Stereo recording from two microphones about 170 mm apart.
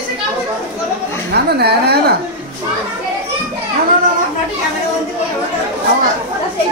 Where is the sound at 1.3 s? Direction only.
75° right (ahead or behind).